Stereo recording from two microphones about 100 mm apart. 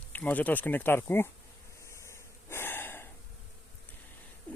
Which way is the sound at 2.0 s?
25° left (ahead or behind).